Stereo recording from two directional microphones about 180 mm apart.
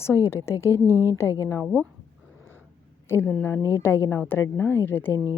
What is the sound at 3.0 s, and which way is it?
A woman's voice, 10° left (ahead or behind).